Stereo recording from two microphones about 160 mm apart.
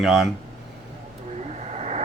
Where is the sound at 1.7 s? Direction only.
45° right (ahead or behind).